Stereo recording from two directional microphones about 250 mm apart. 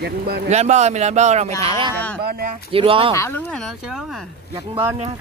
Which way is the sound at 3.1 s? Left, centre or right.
Centre.